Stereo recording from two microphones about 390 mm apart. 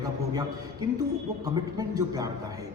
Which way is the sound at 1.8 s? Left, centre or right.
Centre.